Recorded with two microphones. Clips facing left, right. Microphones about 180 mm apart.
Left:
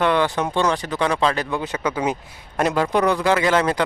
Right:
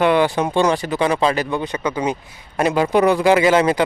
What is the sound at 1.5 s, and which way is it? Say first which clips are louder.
Speech: right 2 dB; 5° left (ahead or behind).